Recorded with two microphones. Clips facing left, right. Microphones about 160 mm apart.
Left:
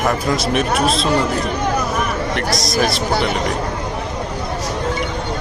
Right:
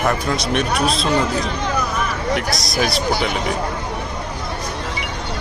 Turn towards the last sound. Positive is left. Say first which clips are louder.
# left 2 dB
turn(degrees=0)  # may be behind; listen again after turning